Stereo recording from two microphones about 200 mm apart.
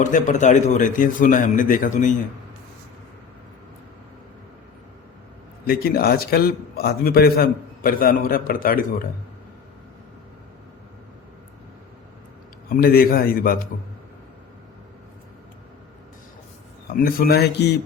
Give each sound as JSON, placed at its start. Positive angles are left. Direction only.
{"t": 0.0, "sound": "a man's voice", "side_deg": 40}
{"t": 5.6, "sound": "a man's voice", "side_deg": 50}
{"t": 12.6, "sound": "a man's voice", "side_deg": 45}
{"t": 17.0, "sound": "a man's voice", "side_deg": 50}